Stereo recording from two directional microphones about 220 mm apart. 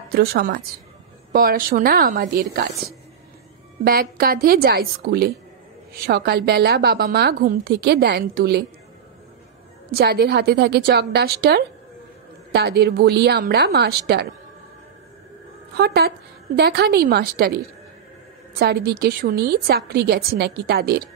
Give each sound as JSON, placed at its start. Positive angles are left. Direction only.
{"t": 0.1, "sound": "a woman's voice", "side_deg": -45}
{"t": 3.8, "sound": "a woman's voice", "side_deg": -40}
{"t": 9.8, "sound": "a woman's voice", "side_deg": -45}
{"t": 15.7, "sound": "a woman's voice", "side_deg": -45}
{"t": 18.6, "sound": "a woman's voice", "side_deg": -45}